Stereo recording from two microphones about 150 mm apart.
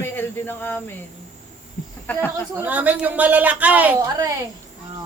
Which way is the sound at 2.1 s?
10° left (ahead or behind).